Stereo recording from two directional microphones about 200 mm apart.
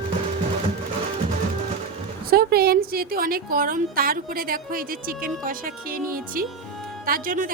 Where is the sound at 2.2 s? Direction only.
50° right (ahead or behind).